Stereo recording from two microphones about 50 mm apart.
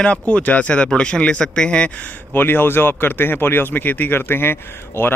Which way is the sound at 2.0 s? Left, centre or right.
Left.